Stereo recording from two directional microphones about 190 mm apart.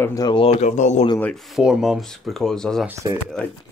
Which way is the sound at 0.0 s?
20° left (ahead or behind).